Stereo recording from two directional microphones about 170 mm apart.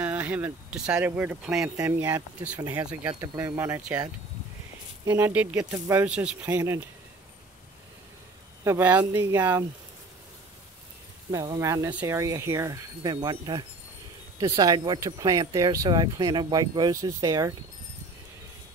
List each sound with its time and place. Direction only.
0.0 s speech: 10° right (ahead or behind)
8.6 s speech: 10° right (ahead or behind)
11.3 s speech: 20° right (ahead or behind)